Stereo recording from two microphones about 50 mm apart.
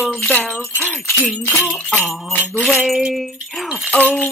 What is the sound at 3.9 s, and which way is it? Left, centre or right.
Speech, left.